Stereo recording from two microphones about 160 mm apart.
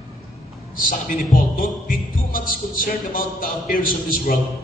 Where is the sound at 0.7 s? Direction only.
60° left (ahead or behind).